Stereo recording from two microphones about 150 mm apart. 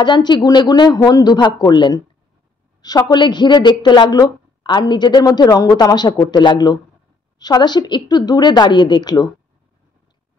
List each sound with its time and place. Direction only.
0.0 s a woman's voice: 30° left (ahead or behind)